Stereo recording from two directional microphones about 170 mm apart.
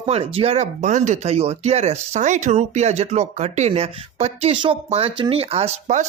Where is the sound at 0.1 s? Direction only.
35° right (ahead or behind).